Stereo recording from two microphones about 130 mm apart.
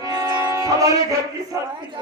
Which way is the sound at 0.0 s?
30° right (ahead or behind).